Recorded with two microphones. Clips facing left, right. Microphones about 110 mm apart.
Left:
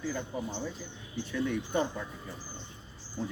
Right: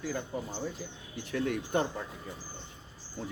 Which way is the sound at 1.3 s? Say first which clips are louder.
Right 1 dB; 65° right (ahead or behind).